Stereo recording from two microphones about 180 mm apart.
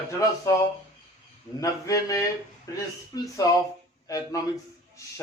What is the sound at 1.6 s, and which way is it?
Speech, 20° left (ahead or behind).